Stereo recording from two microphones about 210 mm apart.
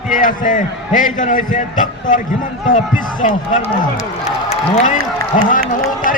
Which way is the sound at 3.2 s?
35° left (ahead or behind).